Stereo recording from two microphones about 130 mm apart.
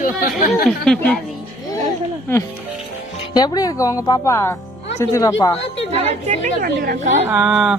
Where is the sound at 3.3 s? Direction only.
30° left (ahead or behind).